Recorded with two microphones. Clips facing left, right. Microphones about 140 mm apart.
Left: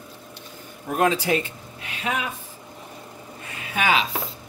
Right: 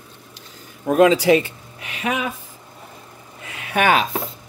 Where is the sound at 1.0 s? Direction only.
90° right.